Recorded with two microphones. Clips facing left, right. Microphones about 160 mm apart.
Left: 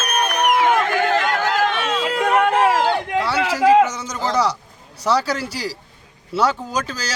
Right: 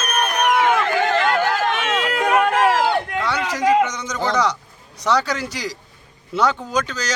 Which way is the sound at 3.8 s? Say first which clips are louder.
Even; 5° left (ahead or behind).